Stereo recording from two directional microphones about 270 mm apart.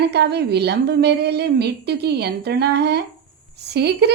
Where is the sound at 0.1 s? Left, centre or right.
Right.